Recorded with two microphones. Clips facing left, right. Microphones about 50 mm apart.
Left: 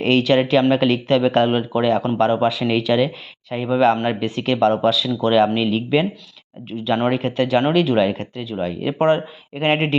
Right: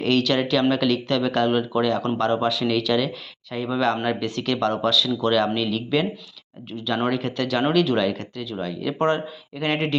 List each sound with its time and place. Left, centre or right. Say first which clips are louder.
0.0 s speech: left 5 dB; left
9.0 s speech: left 5 dB; centre
9.6 s speech: left 5 dB; left